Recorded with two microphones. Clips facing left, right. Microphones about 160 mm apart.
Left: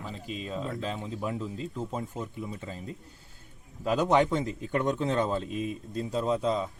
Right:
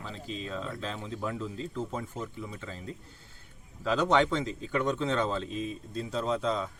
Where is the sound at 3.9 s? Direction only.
20° left (ahead or behind).